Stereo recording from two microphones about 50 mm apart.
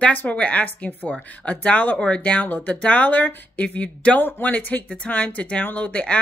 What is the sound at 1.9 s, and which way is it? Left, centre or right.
Speech, left.